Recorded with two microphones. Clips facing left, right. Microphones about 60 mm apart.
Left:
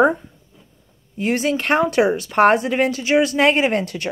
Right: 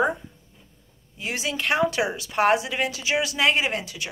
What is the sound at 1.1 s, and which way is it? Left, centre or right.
Speech, left.